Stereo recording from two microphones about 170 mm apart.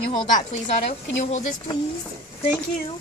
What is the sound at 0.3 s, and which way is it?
A woman's voice, 40° left (ahead or behind).